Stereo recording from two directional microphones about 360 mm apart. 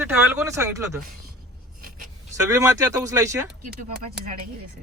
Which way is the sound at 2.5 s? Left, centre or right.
Centre.